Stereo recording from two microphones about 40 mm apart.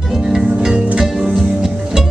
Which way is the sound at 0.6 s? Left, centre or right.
Right.